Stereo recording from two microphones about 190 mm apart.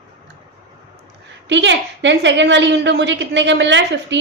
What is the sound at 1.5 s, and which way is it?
A woman's voice, 70° right (ahead or behind).